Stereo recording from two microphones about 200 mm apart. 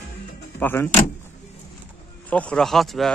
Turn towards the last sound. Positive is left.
turn(degrees=0)  # may be behind; listen again after turning